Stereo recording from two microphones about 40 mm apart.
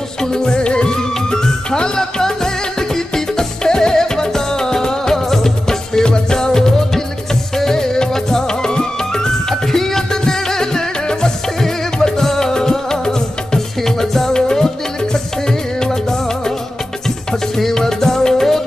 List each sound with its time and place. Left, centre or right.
0.2 s music: centre
17.6 s music: centre